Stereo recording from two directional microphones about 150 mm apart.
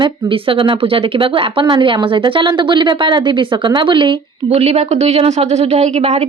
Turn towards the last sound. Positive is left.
turn(degrees=-50)  # may be behind; listen again after turning